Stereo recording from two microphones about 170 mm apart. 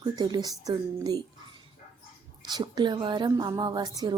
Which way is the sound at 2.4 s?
25° right (ahead or behind).